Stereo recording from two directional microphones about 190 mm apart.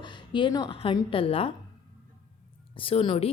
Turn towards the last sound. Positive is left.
turn(degrees=30)  # may be behind; listen again after turning